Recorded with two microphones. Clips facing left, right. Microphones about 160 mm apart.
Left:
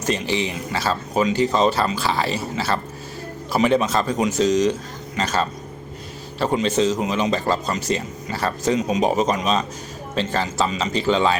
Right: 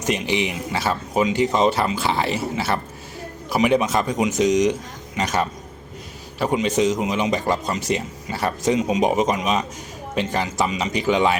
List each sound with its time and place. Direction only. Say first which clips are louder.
0.0 s speech: even; 20° right (ahead or behind)